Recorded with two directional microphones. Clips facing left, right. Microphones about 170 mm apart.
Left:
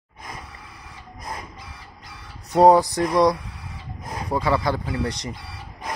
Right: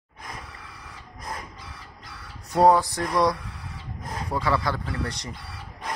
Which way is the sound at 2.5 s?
20° left (ahead or behind).